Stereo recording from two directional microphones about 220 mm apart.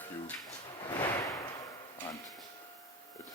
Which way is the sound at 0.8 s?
15° left (ahead or behind).